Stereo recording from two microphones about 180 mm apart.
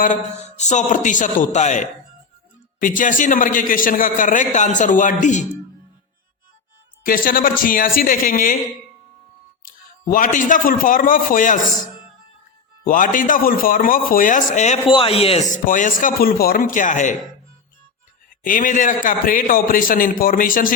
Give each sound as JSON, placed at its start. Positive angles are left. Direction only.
{"t": 0.0, "sound": "a man's voice", "side_deg": 40}
{"t": 7.0, "sound": "a man's voice", "side_deg": 50}
{"t": 9.6, "sound": "a man's voice", "side_deg": 50}
{"t": 14.8, "sound": "a man's voice", "side_deg": 30}
{"t": 18.4, "sound": "a man's voice", "side_deg": 50}